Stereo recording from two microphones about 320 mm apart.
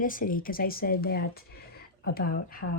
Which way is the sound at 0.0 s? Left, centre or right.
Left.